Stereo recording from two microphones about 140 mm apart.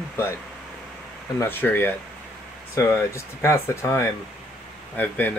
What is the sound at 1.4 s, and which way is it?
Speech, 15° left (ahead or behind).